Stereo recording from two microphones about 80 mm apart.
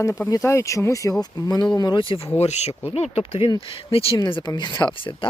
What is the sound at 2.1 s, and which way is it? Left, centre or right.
Speech, left.